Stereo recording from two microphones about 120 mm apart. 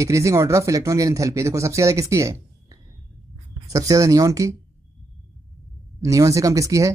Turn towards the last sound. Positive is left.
turn(degrees=-25)  # may be behind; listen again after turning